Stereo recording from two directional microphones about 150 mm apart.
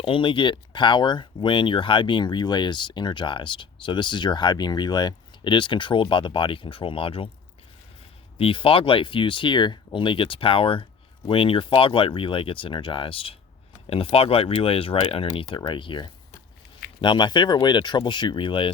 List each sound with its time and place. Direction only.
0.0 s speech: 35° left (ahead or behind)
8.4 s speech: 40° left (ahead or behind)